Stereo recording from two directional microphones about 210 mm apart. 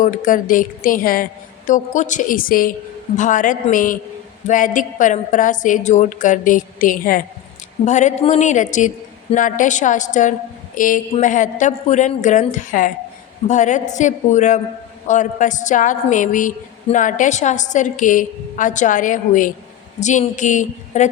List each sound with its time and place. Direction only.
0.0 s a woman's voice: 40° left (ahead or behind)